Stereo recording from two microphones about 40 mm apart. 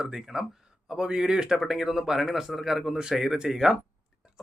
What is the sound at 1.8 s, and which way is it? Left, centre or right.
Speech, centre.